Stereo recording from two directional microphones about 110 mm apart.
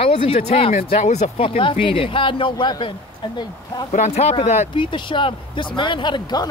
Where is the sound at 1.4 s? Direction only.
55° left (ahead or behind).